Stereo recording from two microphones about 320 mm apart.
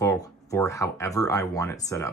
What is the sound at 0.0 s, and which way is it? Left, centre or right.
Speech, centre.